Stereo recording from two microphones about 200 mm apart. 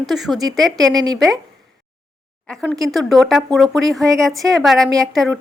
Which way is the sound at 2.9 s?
Centre (ahead or behind).